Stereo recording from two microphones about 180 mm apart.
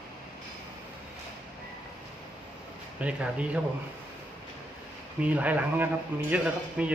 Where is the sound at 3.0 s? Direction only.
5° right (ahead or behind).